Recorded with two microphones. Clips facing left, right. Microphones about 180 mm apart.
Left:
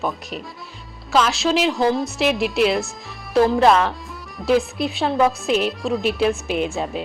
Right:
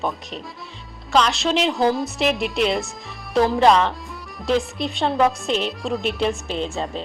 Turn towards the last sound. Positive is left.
turn(degrees=10)  # may be behind; listen again after turning